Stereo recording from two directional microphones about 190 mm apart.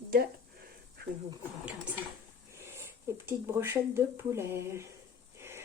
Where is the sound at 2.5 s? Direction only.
15° right (ahead or behind).